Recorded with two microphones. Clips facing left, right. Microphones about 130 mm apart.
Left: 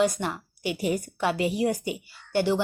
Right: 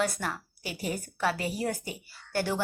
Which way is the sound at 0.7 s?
35° right (ahead or behind).